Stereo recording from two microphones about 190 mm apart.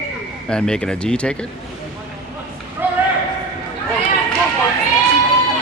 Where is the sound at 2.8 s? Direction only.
10° right (ahead or behind).